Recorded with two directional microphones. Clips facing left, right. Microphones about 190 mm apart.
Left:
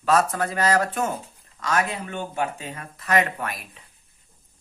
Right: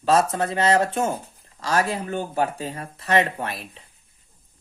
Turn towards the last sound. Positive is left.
turn(degrees=-30)  # may be behind; listen again after turning